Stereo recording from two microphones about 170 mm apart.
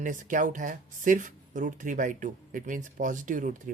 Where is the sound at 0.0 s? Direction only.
50° right (ahead or behind).